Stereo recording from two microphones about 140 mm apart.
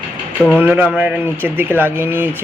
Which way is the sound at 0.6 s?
15° right (ahead or behind).